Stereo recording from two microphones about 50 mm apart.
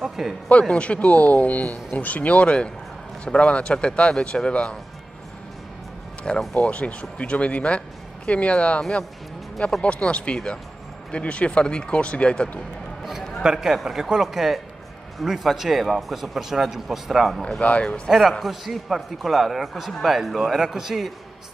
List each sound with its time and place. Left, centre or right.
0.0 s speech: centre
0.5 s speech: left
6.5 s speech: left
13.4 s speech: centre
17.6 s speech: left
18.0 s speech: centre